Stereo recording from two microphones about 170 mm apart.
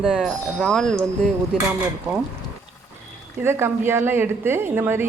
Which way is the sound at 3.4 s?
15° right (ahead or behind).